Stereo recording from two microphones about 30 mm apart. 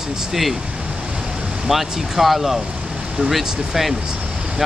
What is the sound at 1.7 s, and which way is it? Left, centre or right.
Speech, centre.